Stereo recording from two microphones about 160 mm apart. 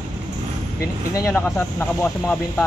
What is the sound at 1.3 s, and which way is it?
Speech, 10° left (ahead or behind).